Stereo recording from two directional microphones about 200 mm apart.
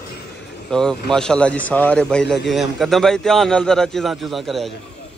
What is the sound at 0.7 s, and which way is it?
A man's voice, 5° left (ahead or behind).